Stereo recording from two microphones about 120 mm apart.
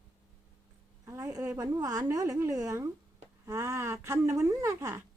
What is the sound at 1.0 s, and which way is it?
A woman's voice, 25° right (ahead or behind).